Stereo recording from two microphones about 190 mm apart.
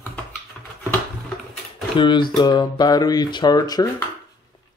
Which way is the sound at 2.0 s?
25° left (ahead or behind).